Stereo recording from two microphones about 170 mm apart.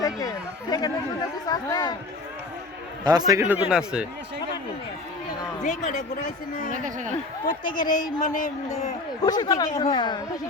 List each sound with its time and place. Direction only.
0.0 s speech: 20° left (ahead or behind)
3.0 s a man's voice: 20° right (ahead or behind)
3.7 s speech: 5° right (ahead or behind)
5.6 s speech: 45° left (ahead or behind)
6.7 s speech: 50° right (ahead or behind)
7.8 s speech: 50° left (ahead or behind)
9.2 s speech: 25° left (ahead or behind)